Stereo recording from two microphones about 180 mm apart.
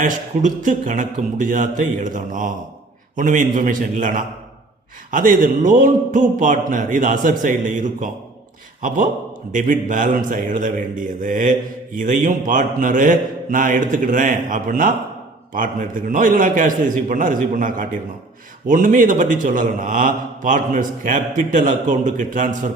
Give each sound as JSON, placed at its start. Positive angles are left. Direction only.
{"t": 0.0, "sound": "a man's voice", "side_deg": -45}
{"t": 9.5, "sound": "a man's voice", "side_deg": -45}